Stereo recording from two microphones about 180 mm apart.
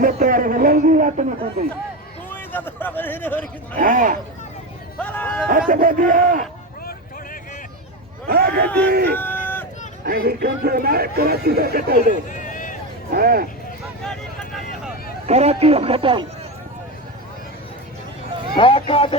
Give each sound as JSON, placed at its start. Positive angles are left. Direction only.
{"t": 0.0, "sound": "a sound", "side_deg": -50}
{"t": 2.3, "sound": "speech", "side_deg": 10}
{"t": 3.8, "sound": "speech", "side_deg": -45}
{"t": 4.9, "sound": "speech", "side_deg": 10}
{"t": 5.5, "sound": "speech", "side_deg": -50}
{"t": 8.3, "sound": "a sound", "side_deg": -60}
{"t": 8.9, "sound": "speech", "side_deg": -60}
{"t": 9.1, "sound": "run", "side_deg": 10}
{"t": 10.0, "sound": "speech", "side_deg": -60}
{"t": 12.3, "sound": "run", "side_deg": 45}
{"t": 13.1, "sound": "speech", "side_deg": -55}
{"t": 14.0, "sound": "vehicle", "side_deg": 0}
{"t": 15.3, "sound": "a man's voice", "side_deg": -35}
{"t": 18.5, "sound": "speech", "side_deg": 30}